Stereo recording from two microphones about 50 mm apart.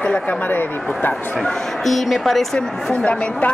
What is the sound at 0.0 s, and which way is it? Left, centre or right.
Speech, left.